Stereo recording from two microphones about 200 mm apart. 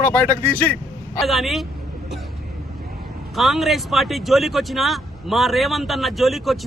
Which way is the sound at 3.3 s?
Centre (ahead or behind).